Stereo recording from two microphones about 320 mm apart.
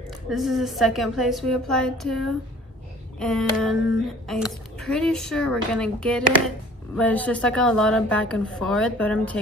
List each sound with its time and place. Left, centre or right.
0.3 s a woman's voice: centre